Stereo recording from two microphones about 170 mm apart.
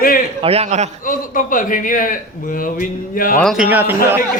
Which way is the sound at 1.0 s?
55° left (ahead or behind).